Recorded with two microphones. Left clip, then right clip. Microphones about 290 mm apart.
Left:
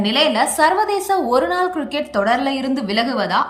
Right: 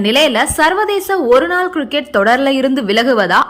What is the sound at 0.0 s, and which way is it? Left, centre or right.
A woman's voice, centre.